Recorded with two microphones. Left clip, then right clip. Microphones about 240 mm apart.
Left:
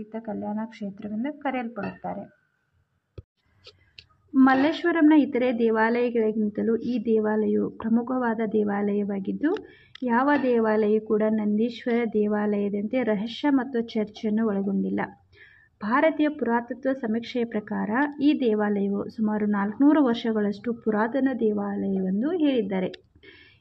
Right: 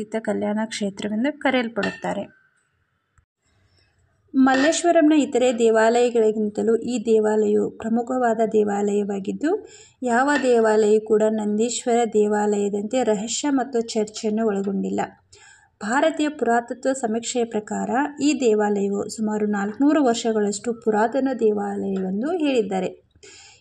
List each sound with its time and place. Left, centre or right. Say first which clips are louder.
0.0 s speech: right 9 dB; right
4.4 s a woman's voice: right 3 dB; centre